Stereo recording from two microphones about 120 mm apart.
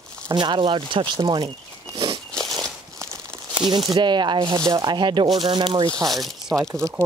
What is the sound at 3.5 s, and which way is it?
Speech, 40° right (ahead or behind).